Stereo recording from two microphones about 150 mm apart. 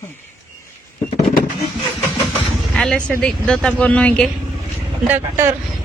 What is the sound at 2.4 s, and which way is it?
Vehicle, centre (ahead or behind).